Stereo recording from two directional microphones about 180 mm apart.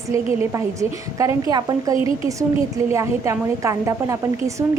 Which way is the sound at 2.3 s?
15° right (ahead or behind).